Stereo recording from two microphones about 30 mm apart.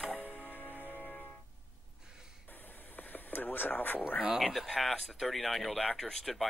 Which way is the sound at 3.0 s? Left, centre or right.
Left.